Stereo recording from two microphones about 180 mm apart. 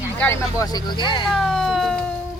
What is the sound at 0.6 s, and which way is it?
Speech, 25° left (ahead or behind).